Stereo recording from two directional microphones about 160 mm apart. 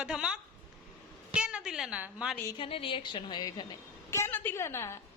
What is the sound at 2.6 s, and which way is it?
A woman's voice, 35° left (ahead or behind).